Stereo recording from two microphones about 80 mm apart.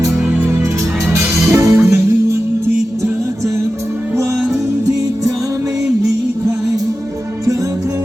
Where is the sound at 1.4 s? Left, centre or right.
Right.